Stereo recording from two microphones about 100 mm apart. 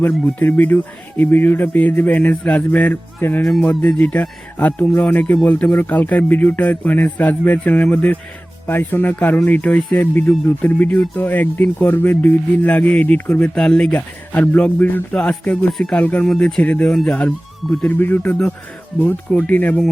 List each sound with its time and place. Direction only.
0.3 s speech: 20° left (ahead or behind)
3.4 s speech: 5° left (ahead or behind)
16.2 s speech: 5° left (ahead or behind)